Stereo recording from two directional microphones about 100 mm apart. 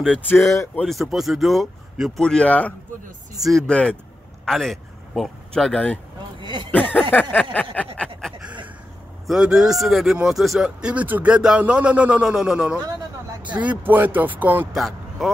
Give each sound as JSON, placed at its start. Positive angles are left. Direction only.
{"t": 0.8, "sound": "speech", "side_deg": 0}
{"t": 2.2, "sound": "a sound", "side_deg": 10}
{"t": 3.3, "sound": "speech", "side_deg": 0}
{"t": 3.6, "sound": "a sound", "side_deg": 10}
{"t": 4.5, "sound": "speech", "side_deg": 5}
{"t": 6.4, "sound": "speech", "side_deg": -50}
{"t": 6.7, "sound": "a sound", "side_deg": 15}
{"t": 9.3, "sound": "speech", "side_deg": -5}
{"t": 14.7, "sound": "speech", "side_deg": -5}